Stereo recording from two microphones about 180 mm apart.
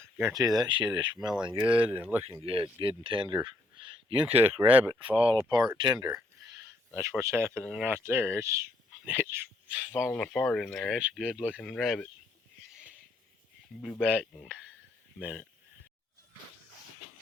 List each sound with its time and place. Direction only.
0.2 s speech: 15° right (ahead or behind)
1.8 s speech: 10° right (ahead or behind)
2.4 s speech: 30° right (ahead or behind)
4.6 s speech: 10° right (ahead or behind)
4.9 s speech: 30° right (ahead or behind); by 12.0 s centre (ahead or behind)
13.8 s speech: centre (ahead or behind)